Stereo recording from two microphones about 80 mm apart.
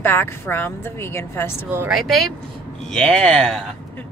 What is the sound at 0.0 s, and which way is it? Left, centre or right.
Speech, left.